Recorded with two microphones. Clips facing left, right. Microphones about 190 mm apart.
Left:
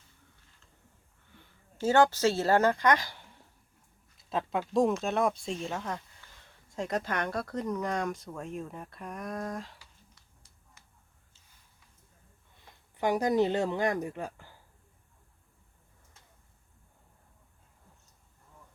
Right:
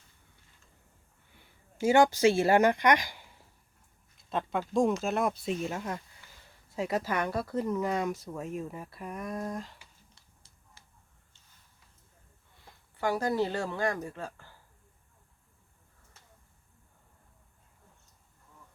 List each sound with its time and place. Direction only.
1.4 s speech: 10° right (ahead or behind)
4.2 s speech: centre (ahead or behind)
10.2 s a sound: 30° right (ahead or behind)
13.0 s a woman's voice: 20° left (ahead or behind)